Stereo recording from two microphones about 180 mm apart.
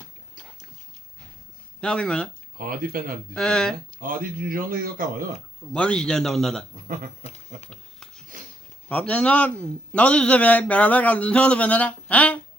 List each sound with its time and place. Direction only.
1.8 s a man's voice: 5° left (ahead or behind)
2.6 s speech: 50° right (ahead or behind)
3.3 s a man's voice: 5° left (ahead or behind)
4.0 s speech: 50° right (ahead or behind)
5.7 s a man's voice: 5° left (ahead or behind)
6.8 s speech: 50° right (ahead or behind)
7.3 s a sound: 35° left (ahead or behind)
7.7 s a sound: 5° left (ahead or behind)
8.9 s a man's voice: 5° left (ahead or behind)